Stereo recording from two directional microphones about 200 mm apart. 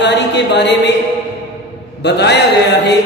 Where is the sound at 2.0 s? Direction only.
60° left (ahead or behind).